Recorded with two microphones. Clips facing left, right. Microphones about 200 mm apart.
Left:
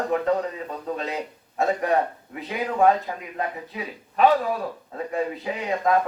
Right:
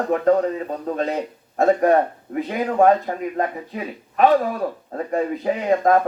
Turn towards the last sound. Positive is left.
turn(degrees=-45)  # may be behind; listen again after turning